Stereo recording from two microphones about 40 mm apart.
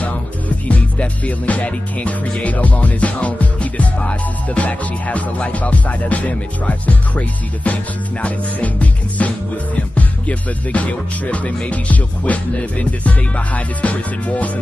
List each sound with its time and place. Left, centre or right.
0.7 s music: left